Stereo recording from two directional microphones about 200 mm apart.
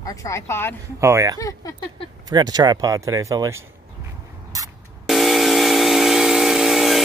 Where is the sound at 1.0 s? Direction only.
15° right (ahead or behind).